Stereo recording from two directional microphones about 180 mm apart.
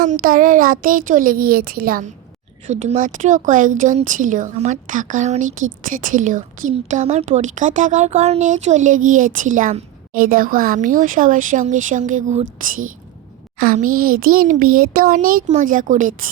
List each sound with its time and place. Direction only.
0.0 s a woman's voice: 50° right (ahead or behind)
2.6 s a woman's voice: 40° right (ahead or behind)